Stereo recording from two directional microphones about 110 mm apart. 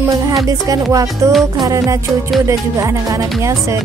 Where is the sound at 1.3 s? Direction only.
Centre (ahead or behind).